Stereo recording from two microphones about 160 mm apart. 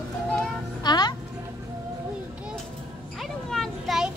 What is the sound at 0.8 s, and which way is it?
Speech, 25° left (ahead or behind).